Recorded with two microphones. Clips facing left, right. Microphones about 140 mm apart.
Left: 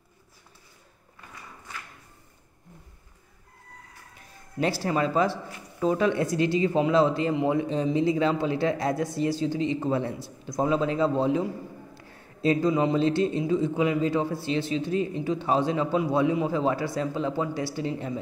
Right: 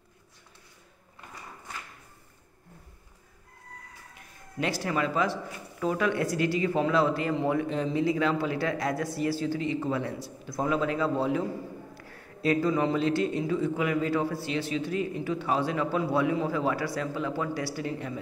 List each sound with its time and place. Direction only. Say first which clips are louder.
4.6 s speech: left 3 dB; 30° left (ahead or behind)